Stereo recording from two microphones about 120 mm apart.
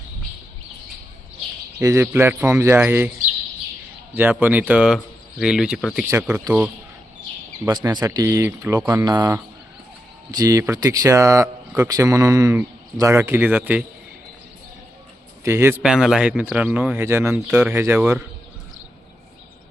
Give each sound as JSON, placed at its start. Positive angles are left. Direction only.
{"t": 1.8, "sound": "speech", "side_deg": -25}
{"t": 4.1, "sound": "speech", "side_deg": -15}
{"t": 7.7, "sound": "speech", "side_deg": -35}
{"t": 9.0, "sound": "speech", "side_deg": -35}
{"t": 10.3, "sound": "speech", "side_deg": -30}
{"t": 15.4, "sound": "speech", "side_deg": -20}
{"t": 15.8, "sound": "speech", "side_deg": -5}